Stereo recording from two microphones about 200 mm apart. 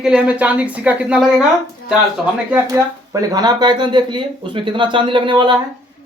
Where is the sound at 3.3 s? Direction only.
20° right (ahead or behind).